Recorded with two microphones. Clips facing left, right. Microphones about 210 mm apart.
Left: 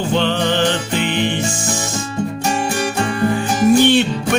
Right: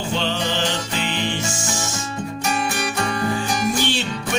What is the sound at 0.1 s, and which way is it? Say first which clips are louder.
Music: left 6 dB; 55° left (ahead or behind).